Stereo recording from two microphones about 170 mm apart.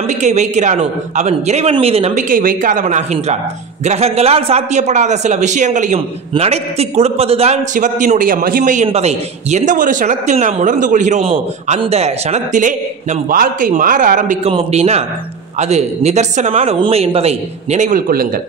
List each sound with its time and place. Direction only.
0.1 s a man's voice: 45° right (ahead or behind)
8.8 s a man's voice: 40° right (ahead or behind); by 18.3 s 55° right (ahead or behind)